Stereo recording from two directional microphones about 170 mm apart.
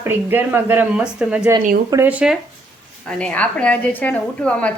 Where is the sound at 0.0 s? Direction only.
10° right (ahead or behind).